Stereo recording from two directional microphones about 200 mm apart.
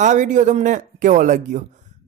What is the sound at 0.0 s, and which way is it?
Speech, 35° right (ahead or behind).